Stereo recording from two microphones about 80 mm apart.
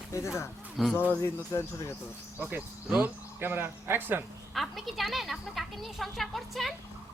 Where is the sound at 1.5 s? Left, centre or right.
Left.